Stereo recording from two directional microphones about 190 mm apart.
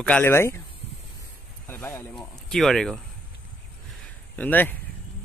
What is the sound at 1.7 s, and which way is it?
Speech, 10° left (ahead or behind).